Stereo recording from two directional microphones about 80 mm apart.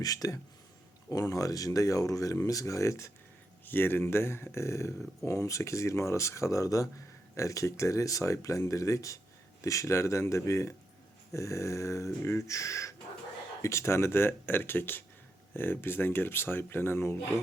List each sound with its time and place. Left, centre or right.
0.0 s speech: left
3.7 s speech: left